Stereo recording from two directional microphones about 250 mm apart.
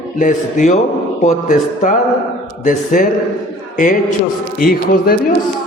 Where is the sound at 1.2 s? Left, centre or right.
Left.